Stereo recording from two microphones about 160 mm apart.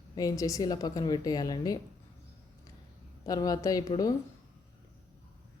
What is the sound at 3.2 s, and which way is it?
Speech, 20° left (ahead or behind).